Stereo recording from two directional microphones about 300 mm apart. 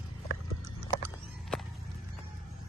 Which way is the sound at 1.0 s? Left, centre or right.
Centre.